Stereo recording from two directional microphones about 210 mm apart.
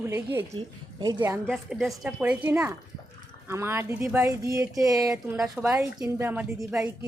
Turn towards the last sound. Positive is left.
turn(degrees=-5)  # may be behind; listen again after turning